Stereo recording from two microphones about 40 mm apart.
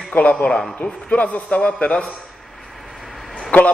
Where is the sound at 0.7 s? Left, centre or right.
Left.